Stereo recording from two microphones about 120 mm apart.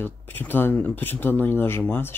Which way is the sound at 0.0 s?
15° left (ahead or behind).